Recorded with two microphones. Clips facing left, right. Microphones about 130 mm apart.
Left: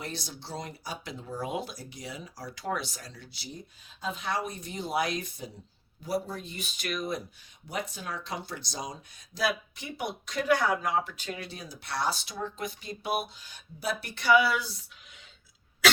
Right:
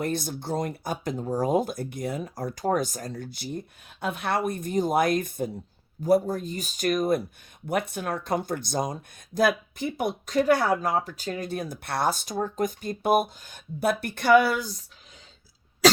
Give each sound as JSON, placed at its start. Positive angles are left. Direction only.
{"t": 0.0, "sound": "speech", "side_deg": -50}
{"t": 7.7, "sound": "speech", "side_deg": -60}
{"t": 15.8, "sound": "cough", "side_deg": -35}